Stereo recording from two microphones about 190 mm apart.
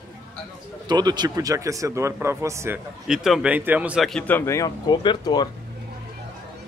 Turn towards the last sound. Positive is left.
turn(degrees=20)  # may be behind; listen again after turning